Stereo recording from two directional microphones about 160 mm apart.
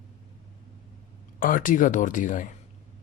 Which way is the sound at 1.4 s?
60° left (ahead or behind).